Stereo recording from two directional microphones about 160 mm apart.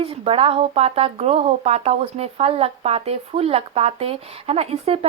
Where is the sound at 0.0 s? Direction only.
35° right (ahead or behind).